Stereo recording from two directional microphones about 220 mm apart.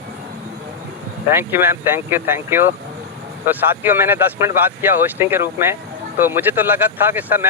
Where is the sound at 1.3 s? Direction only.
10° right (ahead or behind).